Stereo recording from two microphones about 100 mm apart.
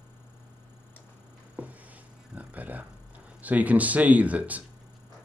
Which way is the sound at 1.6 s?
15° right (ahead or behind).